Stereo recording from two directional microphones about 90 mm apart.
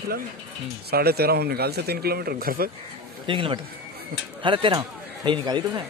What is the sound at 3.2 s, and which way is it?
Speech, 70° right (ahead or behind).